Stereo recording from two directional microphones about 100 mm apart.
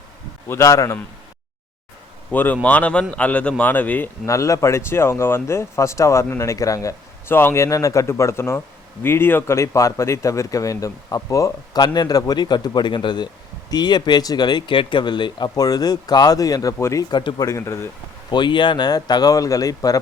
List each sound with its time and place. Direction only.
0.4 s speech: 30° left (ahead or behind)
2.3 s a man's voice: 20° left (ahead or behind)
4.3 s speech: 30° left (ahead or behind)
17.1 s speech: 45° left (ahead or behind)
17.5 s speech: 25° left (ahead or behind)
18.3 s speech: 50° left (ahead or behind)